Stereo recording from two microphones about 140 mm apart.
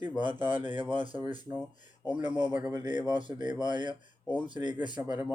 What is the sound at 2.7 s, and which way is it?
Speech, 35° right (ahead or behind).